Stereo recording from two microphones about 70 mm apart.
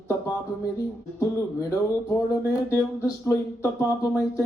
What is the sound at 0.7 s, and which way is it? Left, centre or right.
Speech, left.